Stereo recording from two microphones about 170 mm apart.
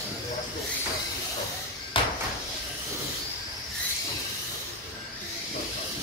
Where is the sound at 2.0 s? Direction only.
30° left (ahead or behind).